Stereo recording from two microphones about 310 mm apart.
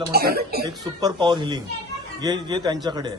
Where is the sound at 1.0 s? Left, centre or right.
Centre.